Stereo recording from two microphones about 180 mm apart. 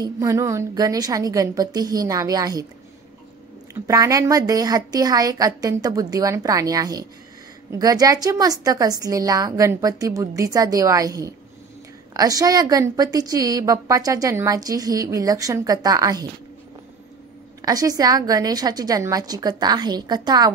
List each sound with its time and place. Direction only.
0.0 s a woman's voice: 15° right (ahead or behind)
3.8 s a woman's voice: 20° right (ahead or behind)
17.6 s a woman's voice: 20° right (ahead or behind)